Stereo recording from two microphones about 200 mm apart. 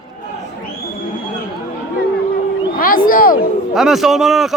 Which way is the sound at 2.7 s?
45° left (ahead or behind).